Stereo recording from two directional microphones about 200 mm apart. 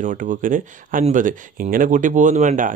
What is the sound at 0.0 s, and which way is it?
Speech, 40° right (ahead or behind).